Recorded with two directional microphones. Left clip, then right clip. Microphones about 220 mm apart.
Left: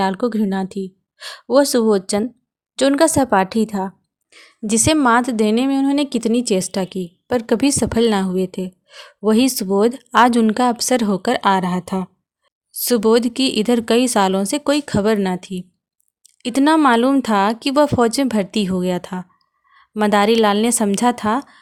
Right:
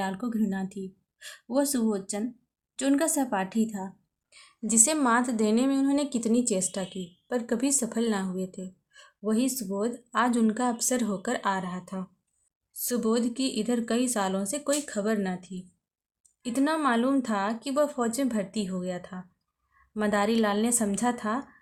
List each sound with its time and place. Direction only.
0.0 s speech: 45° left (ahead or behind)
4.3 s a woman's voice: 30° left (ahead or behind); by 21.4 s 45° left (ahead or behind)